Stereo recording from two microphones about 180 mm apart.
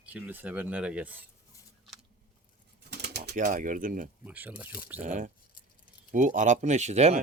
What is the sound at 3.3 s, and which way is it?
Speech, 45° right (ahead or behind).